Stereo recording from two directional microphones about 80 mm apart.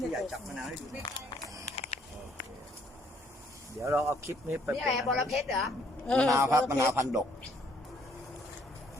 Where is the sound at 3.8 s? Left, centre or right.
Right.